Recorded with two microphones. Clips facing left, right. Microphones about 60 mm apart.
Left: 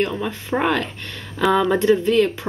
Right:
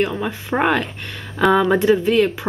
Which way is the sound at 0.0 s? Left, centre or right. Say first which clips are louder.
Right 2 dB; centre.